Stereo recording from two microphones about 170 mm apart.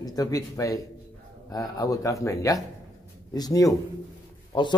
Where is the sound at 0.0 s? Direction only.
20° left (ahead or behind).